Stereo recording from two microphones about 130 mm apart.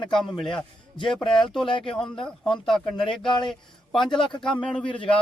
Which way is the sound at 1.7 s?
40° left (ahead or behind).